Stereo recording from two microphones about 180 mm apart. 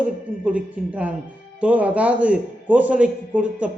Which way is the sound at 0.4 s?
5° right (ahead or behind).